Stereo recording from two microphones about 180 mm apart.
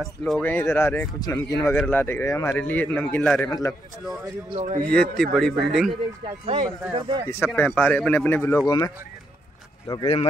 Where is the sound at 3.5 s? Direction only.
20° left (ahead or behind).